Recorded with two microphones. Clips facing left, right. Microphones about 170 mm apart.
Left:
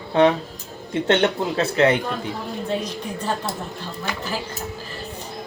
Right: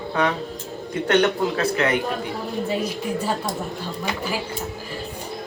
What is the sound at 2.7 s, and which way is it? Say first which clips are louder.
Speech: even; 10° right (ahead or behind).